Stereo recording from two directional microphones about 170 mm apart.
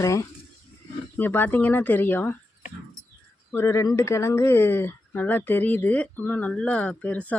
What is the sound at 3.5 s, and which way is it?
Speech, 15° left (ahead or behind).